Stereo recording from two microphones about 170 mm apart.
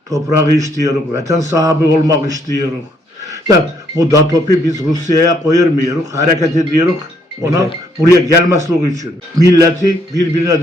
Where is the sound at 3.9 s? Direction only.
20° right (ahead or behind).